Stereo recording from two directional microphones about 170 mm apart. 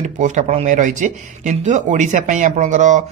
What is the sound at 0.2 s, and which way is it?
Speech, 45° right (ahead or behind).